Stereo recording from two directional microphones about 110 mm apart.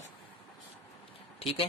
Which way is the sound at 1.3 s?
60° left (ahead or behind).